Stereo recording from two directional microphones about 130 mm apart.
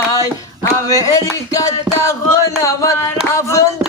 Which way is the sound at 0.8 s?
25° left (ahead or behind).